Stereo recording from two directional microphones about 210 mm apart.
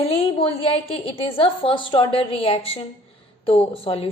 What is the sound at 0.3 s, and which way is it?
A woman's voice, 25° left (ahead or behind).